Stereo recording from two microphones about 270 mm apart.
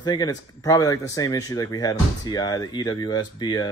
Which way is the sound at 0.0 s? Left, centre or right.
Centre.